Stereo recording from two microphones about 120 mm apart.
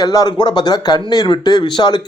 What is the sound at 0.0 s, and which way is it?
Speech, 30° left (ahead or behind).